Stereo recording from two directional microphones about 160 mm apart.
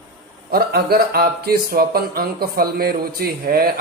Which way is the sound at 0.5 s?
75° right (ahead or behind).